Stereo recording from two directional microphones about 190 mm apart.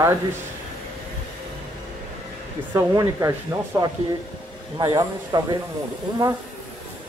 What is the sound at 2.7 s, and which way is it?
Speech, 20° right (ahead or behind).